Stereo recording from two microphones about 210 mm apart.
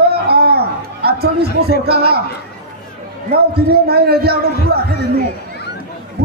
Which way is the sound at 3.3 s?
50° right (ahead or behind).